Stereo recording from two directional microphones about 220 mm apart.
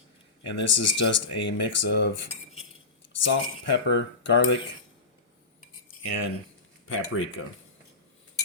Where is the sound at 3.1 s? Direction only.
55° left (ahead or behind).